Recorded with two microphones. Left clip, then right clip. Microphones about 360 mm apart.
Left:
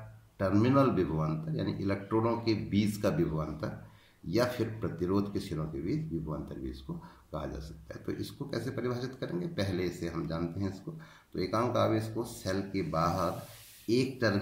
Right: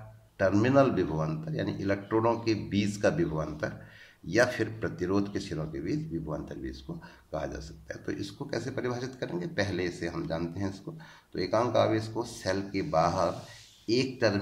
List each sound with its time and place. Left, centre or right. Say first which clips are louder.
0.4 s speech: right 4 dB; centre
7.3 s speech: right 5 dB; centre